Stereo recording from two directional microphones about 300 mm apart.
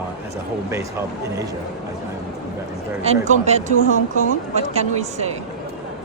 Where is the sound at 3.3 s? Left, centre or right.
Right.